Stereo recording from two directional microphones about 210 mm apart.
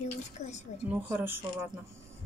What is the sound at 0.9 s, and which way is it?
Speech, 10° right (ahead or behind).